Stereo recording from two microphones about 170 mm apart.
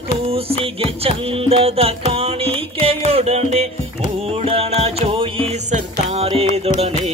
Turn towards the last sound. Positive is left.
turn(degrees=-35)  # may be behind; listen again after turning